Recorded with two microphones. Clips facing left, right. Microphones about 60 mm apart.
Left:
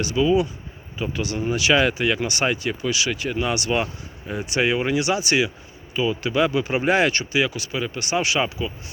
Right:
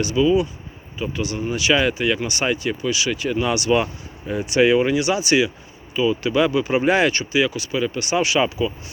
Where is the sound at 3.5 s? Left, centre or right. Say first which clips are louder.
Right 4 dB; left.